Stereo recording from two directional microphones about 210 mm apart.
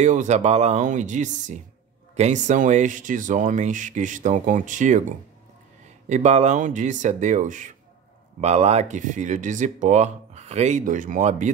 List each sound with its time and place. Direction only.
0.0 s speech: 35° right (ahead or behind)
6.0 s speech: 35° right (ahead or behind)